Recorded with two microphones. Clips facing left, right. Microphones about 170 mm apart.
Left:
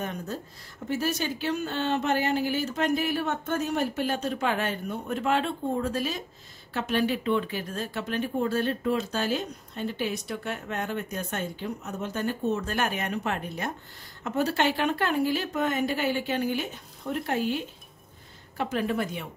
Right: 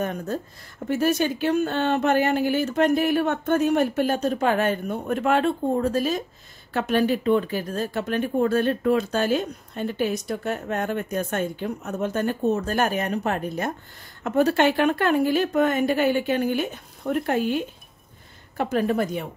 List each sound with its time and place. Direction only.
0.0 s speech: 50° right (ahead or behind)
14.2 s speech: 55° right (ahead or behind)
18.6 s speech: 45° right (ahead or behind)